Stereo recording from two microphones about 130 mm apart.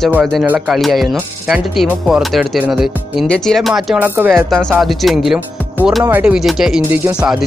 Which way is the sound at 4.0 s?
15° right (ahead or behind).